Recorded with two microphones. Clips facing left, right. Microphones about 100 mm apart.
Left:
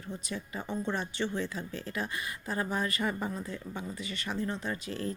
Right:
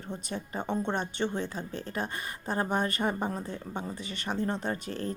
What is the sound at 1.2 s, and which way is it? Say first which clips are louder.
Speech: right 2 dB; 45° right (ahead or behind).